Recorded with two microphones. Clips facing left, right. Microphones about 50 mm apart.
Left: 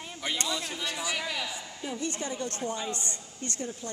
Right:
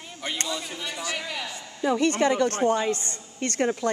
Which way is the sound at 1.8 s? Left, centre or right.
Right.